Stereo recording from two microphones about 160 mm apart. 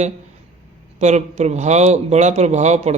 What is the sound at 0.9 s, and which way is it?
A man's voice, 45° right (ahead or behind).